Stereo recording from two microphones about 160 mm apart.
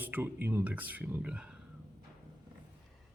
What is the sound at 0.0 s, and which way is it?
A man's voice, 10° right (ahead or behind).